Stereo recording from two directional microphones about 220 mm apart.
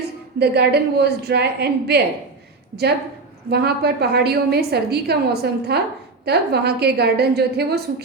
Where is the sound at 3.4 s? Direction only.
45° right (ahead or behind).